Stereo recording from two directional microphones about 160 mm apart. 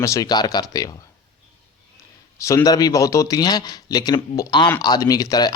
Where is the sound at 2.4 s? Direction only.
20° left (ahead or behind).